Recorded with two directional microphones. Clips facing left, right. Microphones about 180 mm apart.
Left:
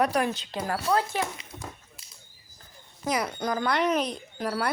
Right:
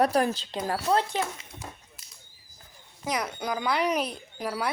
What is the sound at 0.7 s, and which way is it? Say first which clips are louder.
Speech: right 1 dB; 25° right (ahead or behind).